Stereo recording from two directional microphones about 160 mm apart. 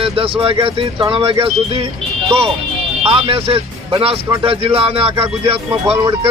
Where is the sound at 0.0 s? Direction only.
35° right (ahead or behind).